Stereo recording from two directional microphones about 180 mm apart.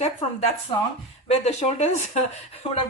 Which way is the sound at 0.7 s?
25° left (ahead or behind).